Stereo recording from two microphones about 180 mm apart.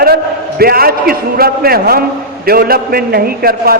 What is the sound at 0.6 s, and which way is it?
A man's voice, 55° right (ahead or behind).